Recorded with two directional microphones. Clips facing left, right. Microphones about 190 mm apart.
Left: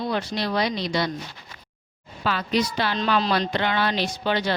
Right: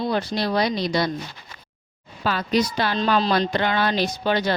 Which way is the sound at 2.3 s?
40° right (ahead or behind).